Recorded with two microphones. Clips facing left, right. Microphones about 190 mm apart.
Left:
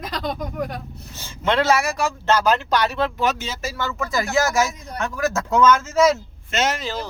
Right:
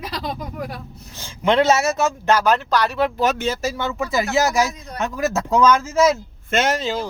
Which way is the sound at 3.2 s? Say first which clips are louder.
Right 3 dB; 50° right (ahead or behind).